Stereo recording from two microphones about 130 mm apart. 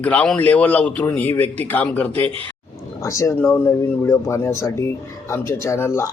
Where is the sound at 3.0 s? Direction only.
25° left (ahead or behind).